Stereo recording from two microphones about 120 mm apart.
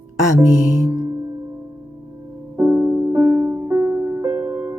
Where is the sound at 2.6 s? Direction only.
15° right (ahead or behind).